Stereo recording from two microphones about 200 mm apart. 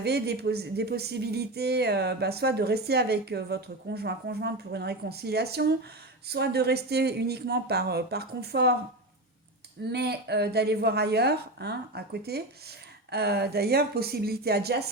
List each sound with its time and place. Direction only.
0.0 s speech: 55° right (ahead or behind)
9.9 s speech: 55° right (ahead or behind)